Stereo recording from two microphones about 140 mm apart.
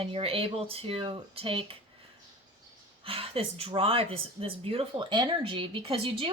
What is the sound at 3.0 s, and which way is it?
Speech, 40° right (ahead or behind).